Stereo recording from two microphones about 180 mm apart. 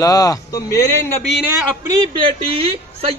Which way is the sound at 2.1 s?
30° right (ahead or behind).